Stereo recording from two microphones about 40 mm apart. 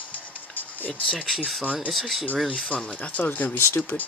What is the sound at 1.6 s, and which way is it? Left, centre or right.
Speech, right.